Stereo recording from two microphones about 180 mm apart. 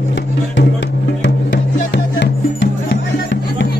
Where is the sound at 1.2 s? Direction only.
80° left.